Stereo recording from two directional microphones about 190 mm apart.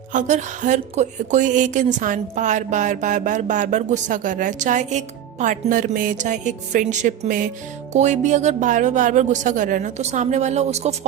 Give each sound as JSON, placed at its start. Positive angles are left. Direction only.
{"t": 0.1, "sound": "speech", "side_deg": -40}